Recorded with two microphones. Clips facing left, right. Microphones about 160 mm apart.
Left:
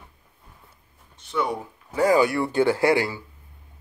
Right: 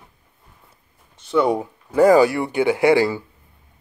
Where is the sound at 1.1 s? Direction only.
90° right.